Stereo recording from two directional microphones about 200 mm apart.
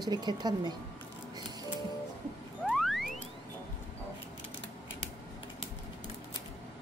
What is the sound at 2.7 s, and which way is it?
Music, centre (ahead or behind).